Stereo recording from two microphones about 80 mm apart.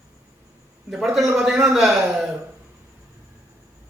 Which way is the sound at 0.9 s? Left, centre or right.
Centre.